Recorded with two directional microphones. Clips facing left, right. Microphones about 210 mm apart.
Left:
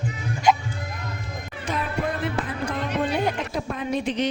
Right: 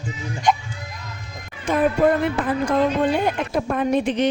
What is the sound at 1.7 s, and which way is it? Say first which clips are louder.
A woman's voice: right 10 dB; 55° right (ahead or behind).